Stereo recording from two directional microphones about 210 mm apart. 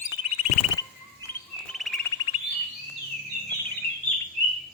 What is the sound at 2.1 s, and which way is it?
Bird, 20° left (ahead or behind).